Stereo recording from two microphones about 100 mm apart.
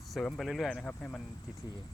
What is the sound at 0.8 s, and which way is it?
Speech, 15° left (ahead or behind).